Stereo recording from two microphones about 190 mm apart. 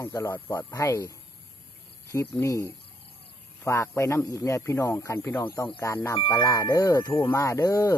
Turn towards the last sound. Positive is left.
turn(degrees=15)  # may be behind; listen again after turning